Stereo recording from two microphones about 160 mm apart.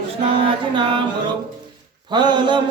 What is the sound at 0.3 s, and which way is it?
Music, 30° right (ahead or behind).